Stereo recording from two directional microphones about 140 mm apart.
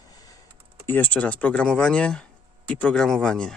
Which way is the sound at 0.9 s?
10° left (ahead or behind).